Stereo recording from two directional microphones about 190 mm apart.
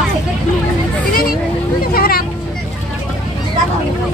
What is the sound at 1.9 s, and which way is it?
Vehicle, 50° left (ahead or behind).